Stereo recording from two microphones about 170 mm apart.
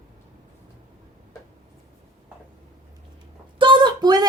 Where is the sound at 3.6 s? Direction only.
30° right (ahead or behind).